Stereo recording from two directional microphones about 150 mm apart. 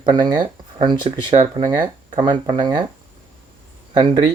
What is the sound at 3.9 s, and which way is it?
Speech, 30° right (ahead or behind).